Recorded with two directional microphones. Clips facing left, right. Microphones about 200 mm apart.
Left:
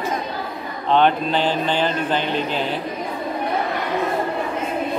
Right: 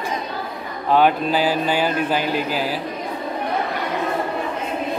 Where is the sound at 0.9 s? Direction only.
5° right (ahead or behind).